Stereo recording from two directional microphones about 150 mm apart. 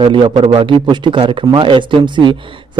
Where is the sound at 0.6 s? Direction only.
35° right (ahead or behind).